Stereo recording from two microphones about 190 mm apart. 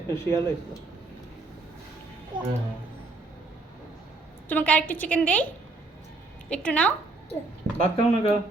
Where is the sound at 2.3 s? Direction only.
25° right (ahead or behind).